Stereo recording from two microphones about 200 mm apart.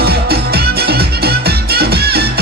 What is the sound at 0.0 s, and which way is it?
Music, 50° right (ahead or behind).